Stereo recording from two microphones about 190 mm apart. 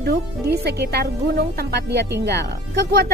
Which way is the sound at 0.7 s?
60° right (ahead or behind).